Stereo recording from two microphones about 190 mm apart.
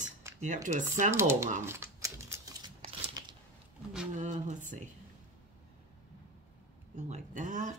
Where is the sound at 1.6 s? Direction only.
15° right (ahead or behind).